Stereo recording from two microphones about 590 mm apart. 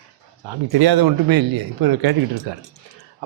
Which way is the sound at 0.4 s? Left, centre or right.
Right.